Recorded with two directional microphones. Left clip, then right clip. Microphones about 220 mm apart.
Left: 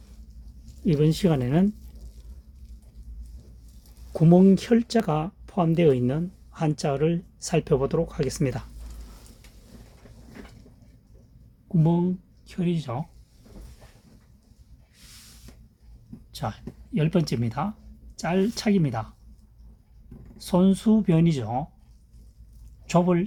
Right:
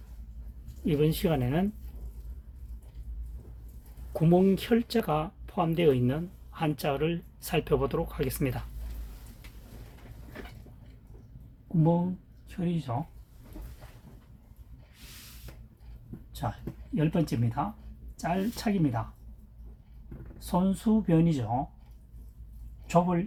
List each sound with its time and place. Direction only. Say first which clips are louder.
0.9 s speech: left 4 dB; 45° left (ahead or behind)
4.1 s speech: left 5 dB; 40° left (ahead or behind)
12.5 s speech: left 5 dB; 60° left (ahead or behind)
16.4 s speech: left 3 dB; 60° left (ahead or behind)
20.4 s speech: left 6 dB; 55° left (ahead or behind)
22.9 s speech: left 3 dB; 55° left (ahead or behind)